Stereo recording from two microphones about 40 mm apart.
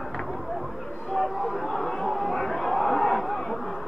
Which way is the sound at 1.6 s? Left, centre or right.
Centre.